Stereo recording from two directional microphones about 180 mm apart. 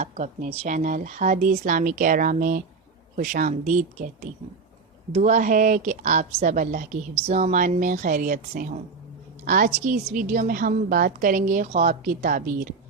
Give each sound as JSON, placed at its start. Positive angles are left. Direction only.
{"t": 0.0, "sound": "a woman's voice", "side_deg": -40}